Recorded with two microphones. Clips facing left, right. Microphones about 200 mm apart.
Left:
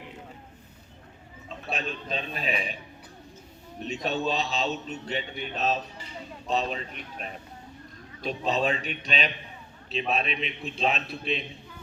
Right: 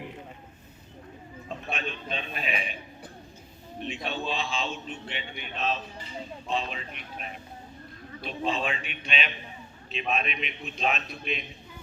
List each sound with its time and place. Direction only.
1.7 s a man's voice: 35° left (ahead or behind)
3.8 s a man's voice: 40° left (ahead or behind)